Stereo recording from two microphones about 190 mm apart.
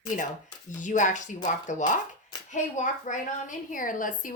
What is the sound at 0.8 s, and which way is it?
Speech, 40° left (ahead or behind).